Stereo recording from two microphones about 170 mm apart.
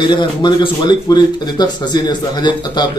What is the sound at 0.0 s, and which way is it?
Speech, 25° left (ahead or behind).